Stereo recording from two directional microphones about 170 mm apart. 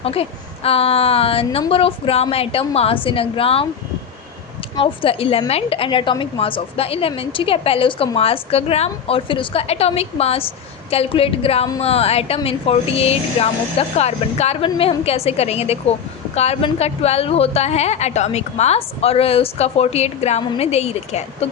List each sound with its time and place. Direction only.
0.0 s speech: 35° left (ahead or behind)
4.8 s speech: 35° left (ahead or behind)